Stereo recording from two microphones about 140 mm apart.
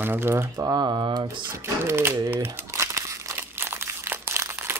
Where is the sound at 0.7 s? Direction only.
30° right (ahead or behind).